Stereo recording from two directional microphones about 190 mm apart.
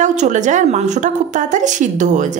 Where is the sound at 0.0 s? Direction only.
40° right (ahead or behind).